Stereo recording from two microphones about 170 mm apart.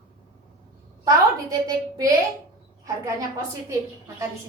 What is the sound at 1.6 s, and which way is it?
A woman's voice, 20° right (ahead or behind).